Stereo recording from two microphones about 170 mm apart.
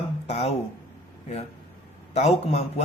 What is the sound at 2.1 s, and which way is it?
Speech, 40° left (ahead or behind).